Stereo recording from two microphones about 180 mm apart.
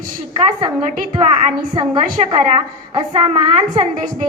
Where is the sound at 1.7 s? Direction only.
25° right (ahead or behind).